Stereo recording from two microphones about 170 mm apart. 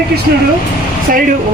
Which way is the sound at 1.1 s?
55° right (ahead or behind).